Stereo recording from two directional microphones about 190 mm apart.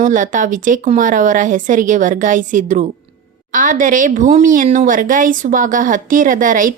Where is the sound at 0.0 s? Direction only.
45° right (ahead or behind).